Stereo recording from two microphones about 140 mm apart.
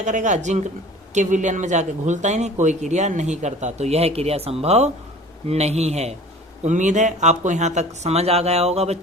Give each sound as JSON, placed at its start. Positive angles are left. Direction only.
{"t": 0.0, "sound": "a man's voice", "side_deg": -60}
{"t": 6.7, "sound": "a man's voice", "side_deg": -60}